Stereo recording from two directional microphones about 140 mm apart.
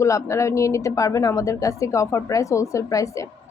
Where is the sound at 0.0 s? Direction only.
20° left (ahead or behind).